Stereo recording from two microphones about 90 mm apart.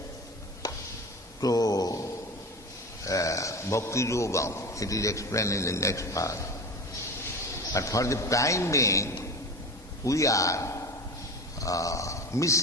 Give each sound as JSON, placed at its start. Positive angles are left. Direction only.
{"t": 1.4, "sound": "a sound", "side_deg": 45}
{"t": 3.0, "sound": "a man's voice", "side_deg": 35}
{"t": 7.7, "sound": "a man's voice", "side_deg": 35}